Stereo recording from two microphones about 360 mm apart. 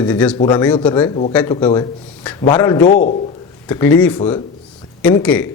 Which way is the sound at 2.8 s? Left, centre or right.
Left.